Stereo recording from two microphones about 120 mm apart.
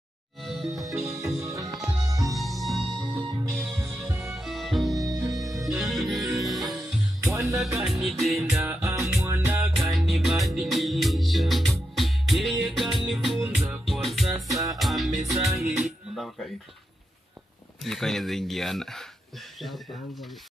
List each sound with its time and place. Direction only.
0.4 s music: centre (ahead or behind)
0.9 s music: 25° right (ahead or behind)
2.3 s music: centre (ahead or behind)
4.9 s music: 25° right (ahead or behind)
5.4 s music: centre (ahead or behind)
7.2 s music: 25° right (ahead or behind)
7.8 s music: centre (ahead or behind)
8.5 s music: 20° right (ahead or behind)
8.9 s music: centre (ahead or behind)
9.2 s music: 25° right (ahead or behind)
9.8 s music: centre (ahead or behind)
17.8 s speech: centre (ahead or behind)